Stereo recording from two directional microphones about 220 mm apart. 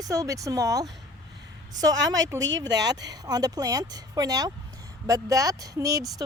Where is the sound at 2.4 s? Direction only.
60° right (ahead or behind).